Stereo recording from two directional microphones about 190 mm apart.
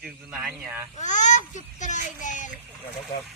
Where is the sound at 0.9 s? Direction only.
40° left (ahead or behind).